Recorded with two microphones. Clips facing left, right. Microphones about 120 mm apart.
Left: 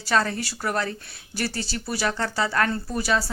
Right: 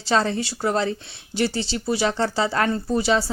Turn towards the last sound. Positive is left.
turn(degrees=-25)  # may be behind; listen again after turning